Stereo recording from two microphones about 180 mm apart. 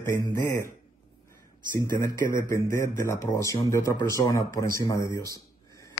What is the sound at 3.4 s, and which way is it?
A man's voice, 15° left (ahead or behind).